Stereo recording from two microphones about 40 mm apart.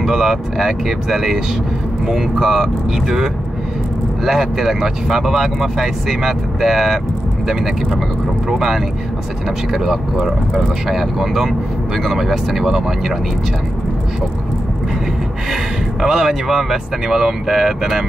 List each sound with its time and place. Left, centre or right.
0.0 s speech: centre
8.5 s speech: centre
15.5 s speech: centre